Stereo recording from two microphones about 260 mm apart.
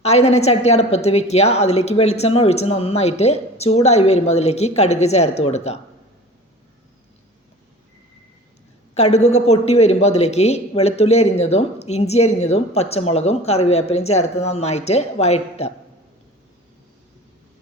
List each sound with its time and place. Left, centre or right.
0.0 s a man's voice: left
9.0 s a man's voice: left